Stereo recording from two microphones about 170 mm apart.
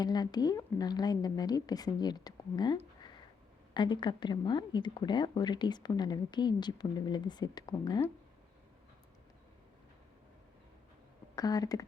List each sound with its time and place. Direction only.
0.0 s speech: 25° left (ahead or behind)
3.8 s speech: 25° left (ahead or behind)
11.3 s speech: 20° left (ahead or behind)